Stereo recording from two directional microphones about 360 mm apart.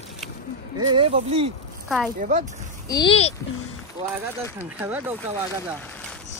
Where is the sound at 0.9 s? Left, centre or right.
Centre.